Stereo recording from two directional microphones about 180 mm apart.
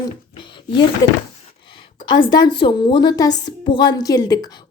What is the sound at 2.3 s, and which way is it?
A woman's voice, 25° left (ahead or behind).